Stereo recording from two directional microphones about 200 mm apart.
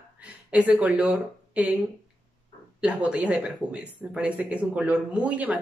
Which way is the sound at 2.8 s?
5° right (ahead or behind).